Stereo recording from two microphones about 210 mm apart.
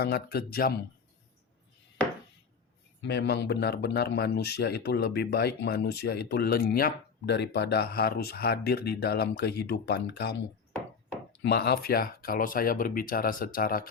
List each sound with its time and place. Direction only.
0.0 s speech: 50° left (ahead or behind)
3.0 s speech: 55° left (ahead or behind)
11.4 s speech: 50° left (ahead or behind)